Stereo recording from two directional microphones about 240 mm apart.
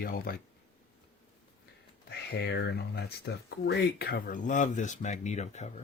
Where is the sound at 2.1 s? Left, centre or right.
Left.